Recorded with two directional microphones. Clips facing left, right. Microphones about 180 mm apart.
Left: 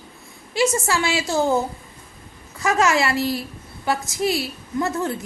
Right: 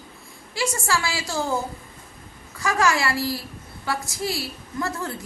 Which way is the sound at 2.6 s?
20° left (ahead or behind).